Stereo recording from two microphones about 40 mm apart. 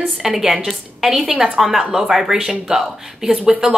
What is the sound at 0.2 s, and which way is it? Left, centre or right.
A woman's voice, centre.